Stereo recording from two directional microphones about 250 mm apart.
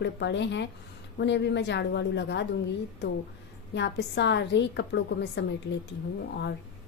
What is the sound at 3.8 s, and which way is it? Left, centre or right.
A woman's voice, left.